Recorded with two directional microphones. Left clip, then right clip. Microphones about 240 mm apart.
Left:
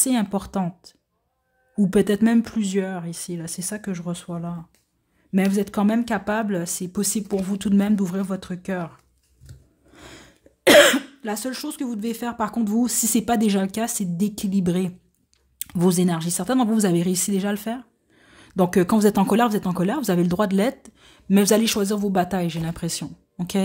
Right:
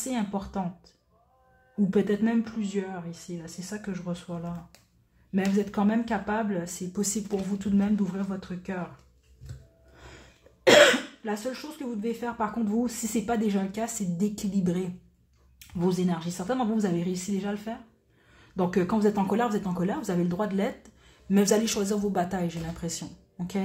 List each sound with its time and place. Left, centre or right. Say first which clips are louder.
0.0 s speech: left 8 dB; left
9.9 s speech: left 6 dB; left